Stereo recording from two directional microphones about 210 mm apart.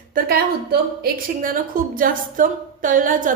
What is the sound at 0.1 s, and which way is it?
A woman's voice, 45° right (ahead or behind).